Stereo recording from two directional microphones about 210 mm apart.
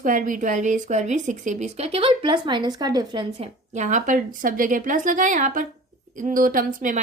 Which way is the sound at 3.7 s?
35° right (ahead or behind).